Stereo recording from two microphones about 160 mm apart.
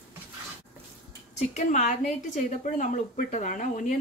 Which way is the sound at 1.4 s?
50° left (ahead or behind).